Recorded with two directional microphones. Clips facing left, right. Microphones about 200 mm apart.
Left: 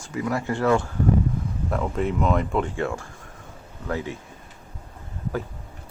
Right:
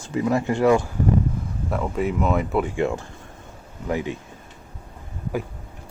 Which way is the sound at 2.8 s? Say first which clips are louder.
Right 4 dB; 20° right (ahead or behind).